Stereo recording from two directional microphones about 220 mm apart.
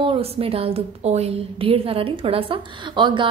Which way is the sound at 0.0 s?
25° right (ahead or behind).